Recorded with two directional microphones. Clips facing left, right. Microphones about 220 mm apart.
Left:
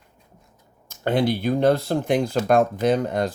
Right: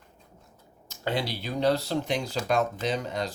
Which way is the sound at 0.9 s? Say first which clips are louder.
Left 9 dB; 50° left (ahead or behind).